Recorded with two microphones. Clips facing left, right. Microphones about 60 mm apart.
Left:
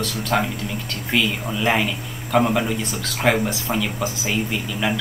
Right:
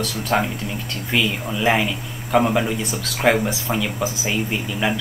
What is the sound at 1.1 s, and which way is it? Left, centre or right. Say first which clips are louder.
Speech: even; centre.